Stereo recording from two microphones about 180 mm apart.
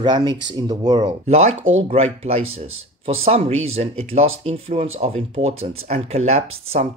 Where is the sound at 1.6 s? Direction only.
90° right.